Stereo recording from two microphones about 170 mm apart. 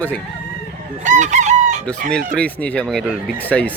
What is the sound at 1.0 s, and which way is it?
Chicken, 45° right (ahead or behind).